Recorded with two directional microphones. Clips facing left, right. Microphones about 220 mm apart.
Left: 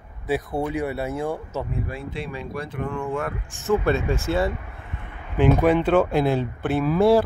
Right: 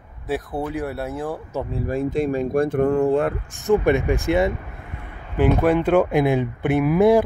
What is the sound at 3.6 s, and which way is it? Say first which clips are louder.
Speech: right 4 dB; 15° right (ahead or behind).